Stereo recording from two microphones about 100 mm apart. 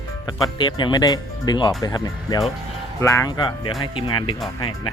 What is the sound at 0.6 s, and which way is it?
Speech, 50° left (ahead or behind).